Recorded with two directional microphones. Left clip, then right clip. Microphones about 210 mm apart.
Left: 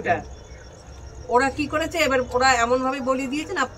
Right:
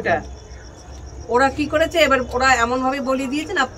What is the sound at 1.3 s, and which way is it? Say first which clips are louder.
A man's voice: right 3 dB; 15° right (ahead or behind).